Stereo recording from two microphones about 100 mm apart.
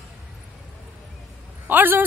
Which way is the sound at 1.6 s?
20° right (ahead or behind).